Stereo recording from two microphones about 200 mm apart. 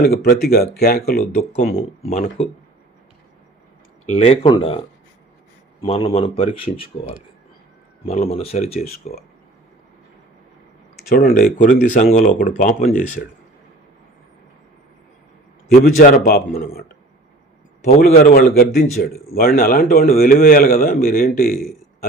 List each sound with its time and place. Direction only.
0.3 s a man's voice: 50° left (ahead or behind); by 2.2 s 35° left (ahead or behind)
4.0 s speech: 30° left (ahead or behind)
8.0 s speech: 30° left (ahead or behind)
11.1 s a man's voice: 50° left (ahead or behind)
15.8 s a man's voice: 45° left (ahead or behind)
17.8 s a man's voice: 50° left (ahead or behind)